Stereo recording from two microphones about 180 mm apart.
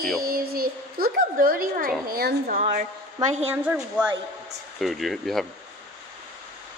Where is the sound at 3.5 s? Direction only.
10° right (ahead or behind).